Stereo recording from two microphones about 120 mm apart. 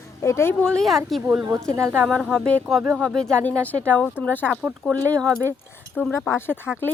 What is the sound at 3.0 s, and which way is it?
Speech, 5° left (ahead or behind).